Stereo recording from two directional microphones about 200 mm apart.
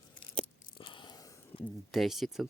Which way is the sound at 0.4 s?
25° left (ahead or behind).